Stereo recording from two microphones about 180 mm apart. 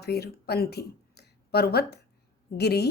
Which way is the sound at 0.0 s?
65° left (ahead or behind).